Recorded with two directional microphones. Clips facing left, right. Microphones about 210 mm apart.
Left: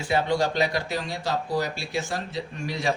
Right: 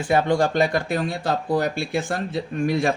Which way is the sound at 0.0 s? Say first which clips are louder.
Right 4 dB; 50° right (ahead or behind).